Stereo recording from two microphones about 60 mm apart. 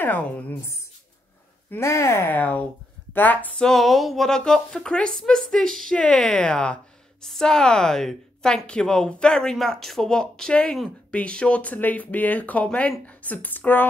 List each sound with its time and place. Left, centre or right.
0.0 s speech: left
1.8 s speech: left
2.3 s speech: left
3.1 s a sound: left
3.5 s speech: centre
4.4 s a woman's voice: centre; by 13.8 s left